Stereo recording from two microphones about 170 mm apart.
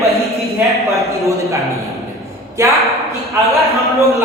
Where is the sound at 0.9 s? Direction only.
20° right (ahead or behind).